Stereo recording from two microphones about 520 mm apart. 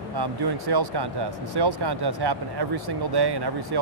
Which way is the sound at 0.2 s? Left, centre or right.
Right.